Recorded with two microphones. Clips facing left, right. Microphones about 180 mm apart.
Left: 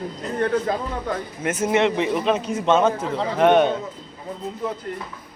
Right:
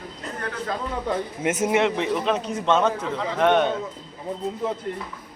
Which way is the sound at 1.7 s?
5° right (ahead or behind).